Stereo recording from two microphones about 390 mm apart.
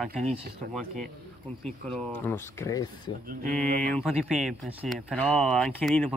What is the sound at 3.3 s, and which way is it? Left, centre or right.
Speech, centre.